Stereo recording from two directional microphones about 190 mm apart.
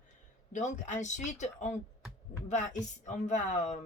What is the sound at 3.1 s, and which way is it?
Speech, 40° left (ahead or behind).